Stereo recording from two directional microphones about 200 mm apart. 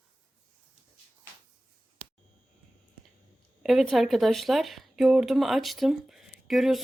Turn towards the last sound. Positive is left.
turn(degrees=0)  # may be behind; listen again after turning